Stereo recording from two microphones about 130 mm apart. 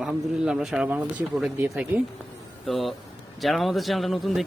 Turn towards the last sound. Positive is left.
turn(degrees=0)  # may be behind; listen again after turning